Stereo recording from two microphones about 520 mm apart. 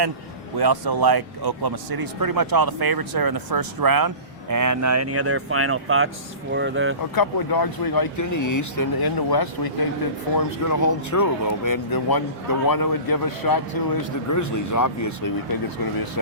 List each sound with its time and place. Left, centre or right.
0.5 s speech: right
7.2 s a man's voice: left